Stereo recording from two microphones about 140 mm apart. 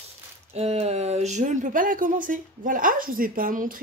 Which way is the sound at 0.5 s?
50° right (ahead or behind).